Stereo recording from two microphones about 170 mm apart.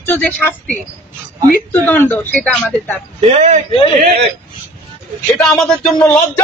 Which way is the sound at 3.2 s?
40° right (ahead or behind).